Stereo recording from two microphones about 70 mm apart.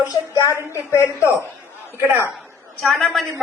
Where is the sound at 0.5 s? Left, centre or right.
Left.